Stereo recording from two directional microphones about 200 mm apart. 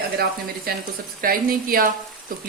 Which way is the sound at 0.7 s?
50° right (ahead or behind).